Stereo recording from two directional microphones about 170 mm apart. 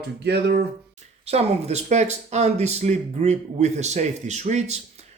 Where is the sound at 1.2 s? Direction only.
35° right (ahead or behind).